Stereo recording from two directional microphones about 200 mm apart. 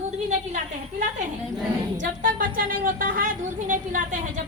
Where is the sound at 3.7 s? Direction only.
40° right (ahead or behind).